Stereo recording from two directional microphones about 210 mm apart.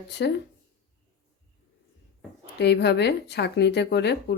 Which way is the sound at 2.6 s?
55° left (ahead or behind).